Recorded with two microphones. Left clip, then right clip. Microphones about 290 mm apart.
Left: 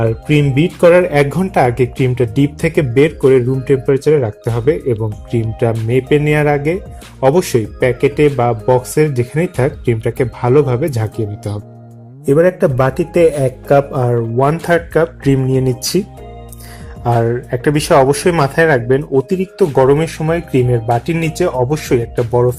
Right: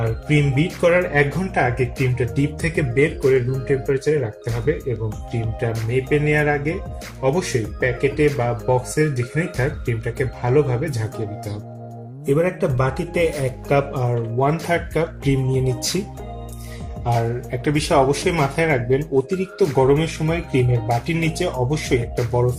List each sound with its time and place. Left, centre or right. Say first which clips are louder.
0.0 s speech: left 7 dB; centre
17.0 s speech: left 8 dB; centre